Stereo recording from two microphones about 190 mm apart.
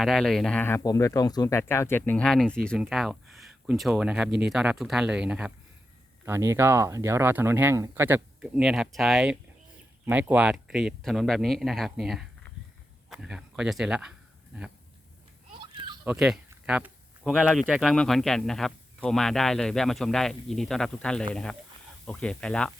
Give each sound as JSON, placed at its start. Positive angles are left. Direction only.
{"t": 0.0, "sound": "a man's voice", "side_deg": 0}
{"t": 15.6, "sound": "a sound", "side_deg": -25}
{"t": 16.0, "sound": "a man's voice", "side_deg": 0}